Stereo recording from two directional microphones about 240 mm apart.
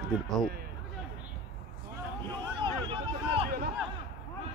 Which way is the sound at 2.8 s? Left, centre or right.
Right.